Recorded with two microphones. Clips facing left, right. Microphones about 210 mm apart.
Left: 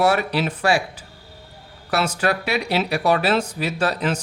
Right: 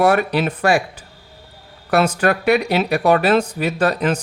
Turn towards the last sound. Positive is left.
turn(degrees=-55)  # may be behind; listen again after turning